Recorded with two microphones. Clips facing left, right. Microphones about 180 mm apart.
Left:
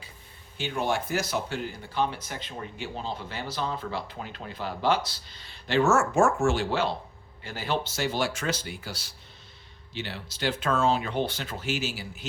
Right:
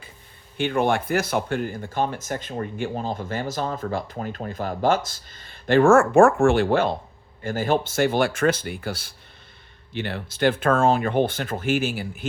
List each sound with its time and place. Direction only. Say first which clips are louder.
0.5 s speech: right 7 dB; 55° right (ahead or behind)